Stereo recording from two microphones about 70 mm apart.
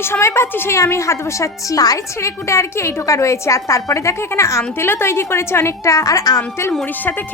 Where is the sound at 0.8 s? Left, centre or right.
Left.